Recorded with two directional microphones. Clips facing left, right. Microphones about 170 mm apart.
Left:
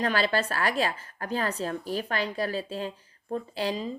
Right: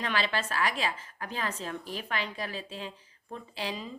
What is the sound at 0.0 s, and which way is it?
Speech, 40° left (ahead or behind).